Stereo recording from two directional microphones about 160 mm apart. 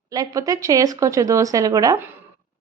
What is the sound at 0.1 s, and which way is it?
A woman's voice, 20° right (ahead or behind).